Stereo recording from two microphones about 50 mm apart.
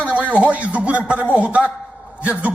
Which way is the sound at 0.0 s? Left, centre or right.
Right.